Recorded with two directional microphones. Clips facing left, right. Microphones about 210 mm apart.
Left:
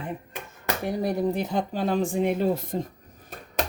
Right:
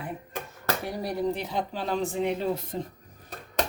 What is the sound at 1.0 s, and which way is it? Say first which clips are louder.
Speech: left 3 dB; 45° left (ahead or behind).